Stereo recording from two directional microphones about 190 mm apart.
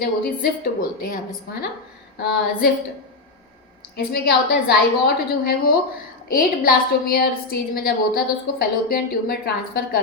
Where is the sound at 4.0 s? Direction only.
55° left (ahead or behind).